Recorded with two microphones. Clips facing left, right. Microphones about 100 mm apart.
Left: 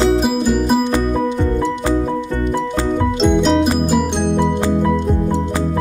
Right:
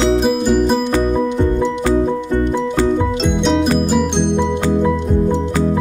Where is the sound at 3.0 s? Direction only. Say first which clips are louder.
Left 2 dB; centre (ahead or behind).